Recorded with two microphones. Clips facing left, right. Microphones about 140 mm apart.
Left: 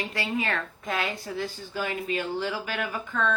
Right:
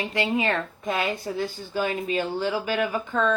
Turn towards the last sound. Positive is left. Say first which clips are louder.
# right 5 dB
turn(degrees=-30)  # may be behind; listen again after turning